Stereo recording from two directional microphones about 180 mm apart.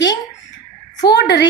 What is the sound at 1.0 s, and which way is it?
Speech, 70° left (ahead or behind).